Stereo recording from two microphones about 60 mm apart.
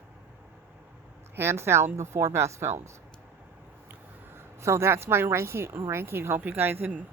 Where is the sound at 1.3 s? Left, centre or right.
Right.